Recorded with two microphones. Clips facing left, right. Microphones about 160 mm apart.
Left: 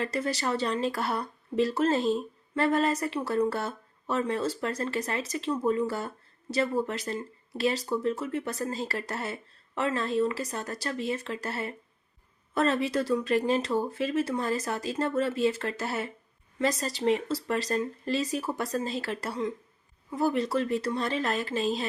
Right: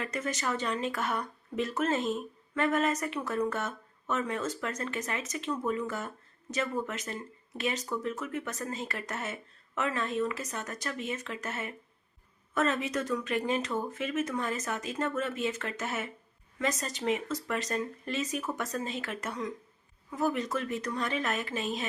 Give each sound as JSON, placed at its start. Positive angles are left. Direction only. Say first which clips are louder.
{"t": 0.0, "sound": "speech", "louder": "left 4 dB", "side_deg": 35}